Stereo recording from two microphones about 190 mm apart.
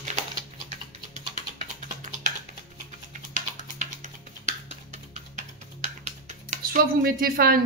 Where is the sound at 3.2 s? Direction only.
40° right (ahead or behind).